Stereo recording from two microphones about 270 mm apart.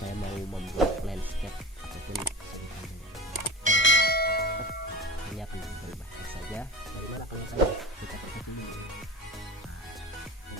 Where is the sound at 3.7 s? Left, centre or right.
Left.